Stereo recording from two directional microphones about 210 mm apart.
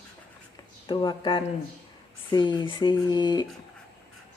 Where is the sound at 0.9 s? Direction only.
20° left (ahead or behind).